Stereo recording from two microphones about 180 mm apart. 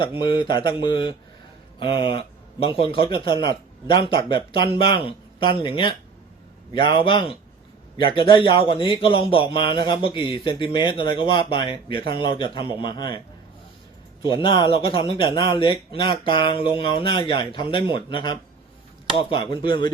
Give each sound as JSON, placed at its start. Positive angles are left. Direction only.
{"t": 0.2, "sound": "a man's voice", "side_deg": 25}
{"t": 14.3, "sound": "a man's voice", "side_deg": 25}